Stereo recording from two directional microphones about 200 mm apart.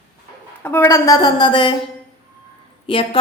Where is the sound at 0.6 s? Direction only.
10° left (ahead or behind).